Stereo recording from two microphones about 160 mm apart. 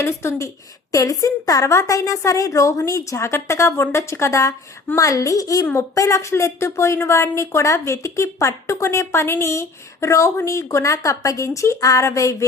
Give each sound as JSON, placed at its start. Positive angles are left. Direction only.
{"t": 0.0, "sound": "a woman's voice", "side_deg": 15}